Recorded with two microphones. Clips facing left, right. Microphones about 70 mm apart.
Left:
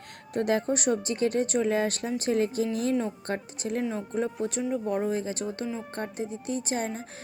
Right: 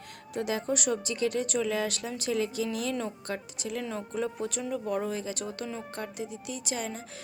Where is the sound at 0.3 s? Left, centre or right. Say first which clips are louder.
Left 4 dB; left.